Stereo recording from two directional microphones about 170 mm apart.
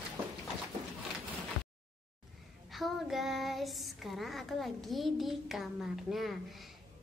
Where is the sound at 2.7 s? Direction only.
Centre (ahead or behind).